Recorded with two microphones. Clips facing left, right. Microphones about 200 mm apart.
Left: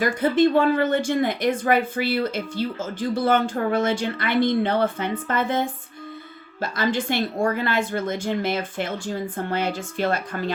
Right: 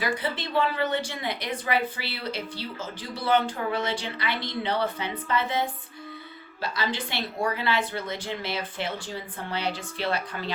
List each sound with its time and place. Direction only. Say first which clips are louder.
0.0 s speech: left 11 dB; 45° left (ahead or behind)